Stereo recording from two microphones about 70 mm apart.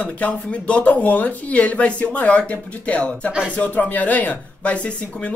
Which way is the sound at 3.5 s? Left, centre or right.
Left.